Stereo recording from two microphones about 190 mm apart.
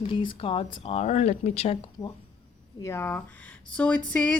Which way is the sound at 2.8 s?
10° left (ahead or behind).